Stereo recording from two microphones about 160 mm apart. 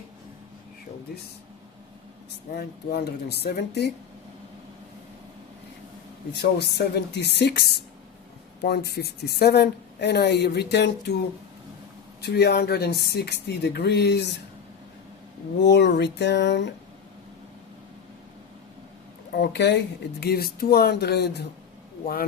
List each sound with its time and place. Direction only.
2.6 s speech: 85° left
6.3 s speech: 90° left
12.2 s speech: 90° left
15.6 s speech: 90° left
19.3 s speech: 90° left
22.0 s speech: 65° left (ahead or behind)